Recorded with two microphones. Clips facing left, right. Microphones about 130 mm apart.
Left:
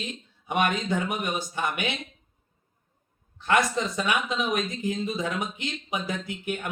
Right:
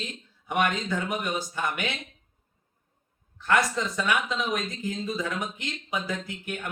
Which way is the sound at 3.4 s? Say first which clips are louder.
Left 1 dB; 20° left (ahead or behind).